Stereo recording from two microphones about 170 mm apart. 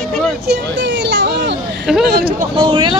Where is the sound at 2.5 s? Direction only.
30° right (ahead or behind).